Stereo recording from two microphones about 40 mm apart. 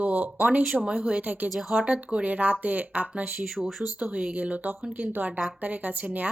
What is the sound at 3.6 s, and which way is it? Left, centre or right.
Speech, centre.